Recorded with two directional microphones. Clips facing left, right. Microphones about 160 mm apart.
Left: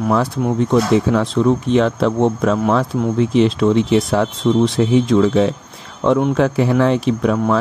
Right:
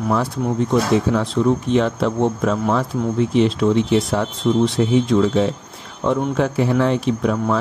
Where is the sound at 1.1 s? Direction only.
90° left.